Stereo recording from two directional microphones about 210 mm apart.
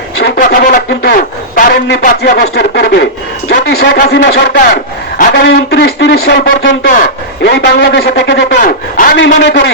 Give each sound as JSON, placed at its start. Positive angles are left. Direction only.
{"t": 0.2, "sound": "a man's voice", "side_deg": 45}
{"t": 8.6, "sound": "a man's voice", "side_deg": 40}
{"t": 9.1, "sound": "speech", "side_deg": 55}